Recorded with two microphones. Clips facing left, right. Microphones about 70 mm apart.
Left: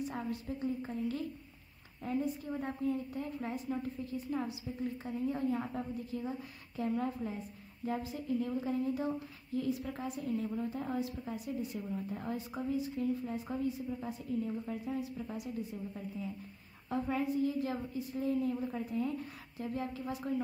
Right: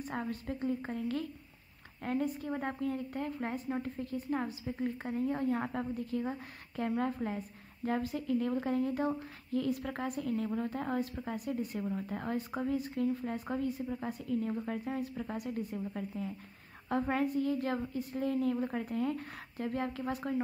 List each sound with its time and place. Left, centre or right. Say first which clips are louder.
0.0 s a woman's voice: even; right
2.0 s a woman's voice: right 2 dB; right